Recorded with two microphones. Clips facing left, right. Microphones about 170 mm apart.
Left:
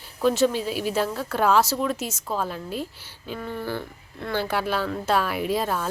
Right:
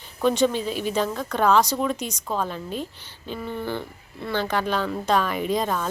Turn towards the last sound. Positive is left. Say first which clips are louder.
# right 1 dB
turn(degrees=5)  # may be behind; listen again after turning